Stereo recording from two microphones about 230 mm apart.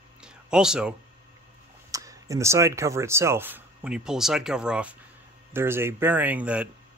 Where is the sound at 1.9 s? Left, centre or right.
Centre.